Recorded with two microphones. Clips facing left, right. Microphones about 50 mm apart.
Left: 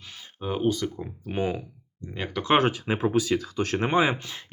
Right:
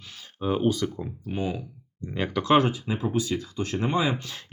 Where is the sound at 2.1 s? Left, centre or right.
Centre.